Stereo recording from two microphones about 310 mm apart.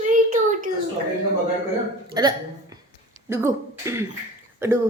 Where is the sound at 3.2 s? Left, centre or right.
Centre.